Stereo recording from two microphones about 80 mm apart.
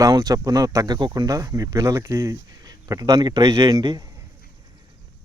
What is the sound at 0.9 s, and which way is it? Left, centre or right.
Speech, right.